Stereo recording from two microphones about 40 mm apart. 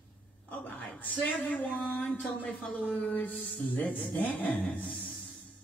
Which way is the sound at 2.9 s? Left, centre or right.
Left.